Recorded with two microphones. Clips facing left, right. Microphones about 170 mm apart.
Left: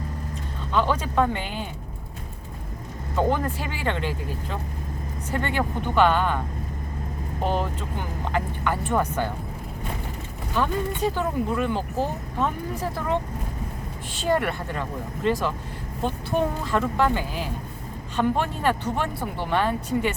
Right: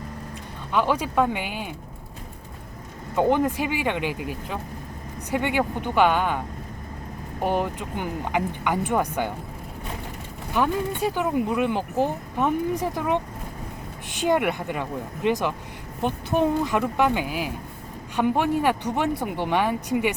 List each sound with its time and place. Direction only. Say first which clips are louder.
0.7 s speech: right 1 dB; 10° right (ahead or behind)
3.2 s speech: right 3 dB; 15° right (ahead or behind)
7.4 s speech: right 2 dB; 15° right (ahead or behind)
10.5 s speech: right 2 dB; 15° right (ahead or behind)